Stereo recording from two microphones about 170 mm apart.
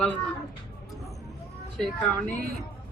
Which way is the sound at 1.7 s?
Centre (ahead or behind).